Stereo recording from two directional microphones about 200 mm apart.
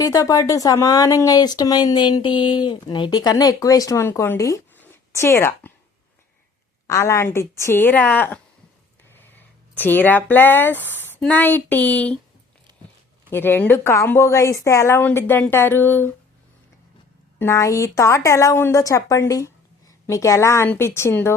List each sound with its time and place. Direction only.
0.0 s speech: 15° left (ahead or behind)
6.8 s speech: 15° left (ahead or behind)
13.3 s speech: 10° left (ahead or behind)
17.4 s speech: 15° left (ahead or behind)